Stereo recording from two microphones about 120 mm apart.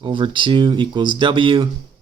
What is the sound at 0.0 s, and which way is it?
Speech, 45° right (ahead or behind).